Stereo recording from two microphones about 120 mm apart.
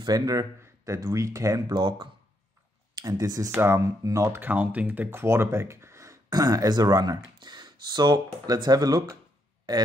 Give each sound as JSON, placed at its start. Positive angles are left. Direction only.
{"t": 0.0, "sound": "speech", "side_deg": -30}
{"t": 1.8, "sound": "speech", "side_deg": -40}